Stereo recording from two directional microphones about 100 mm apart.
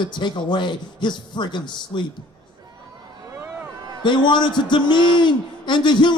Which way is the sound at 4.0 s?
50° left (ahead or behind).